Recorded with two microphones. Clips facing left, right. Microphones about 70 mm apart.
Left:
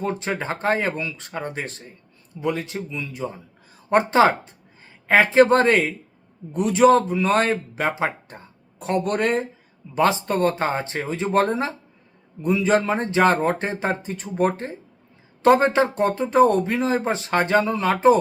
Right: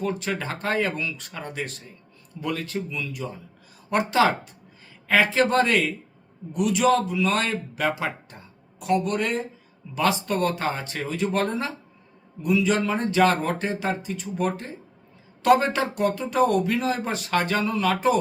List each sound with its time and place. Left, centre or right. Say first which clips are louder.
0.0 s a man's voice: left 2 dB; left
9.9 s a man's voice: left 4 dB; left